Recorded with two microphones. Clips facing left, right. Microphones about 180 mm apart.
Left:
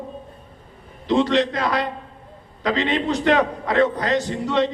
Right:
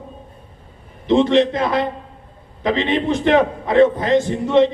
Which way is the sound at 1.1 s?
20° right (ahead or behind).